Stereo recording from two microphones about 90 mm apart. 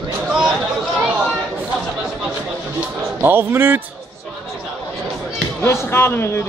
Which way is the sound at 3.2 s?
25° right (ahead or behind).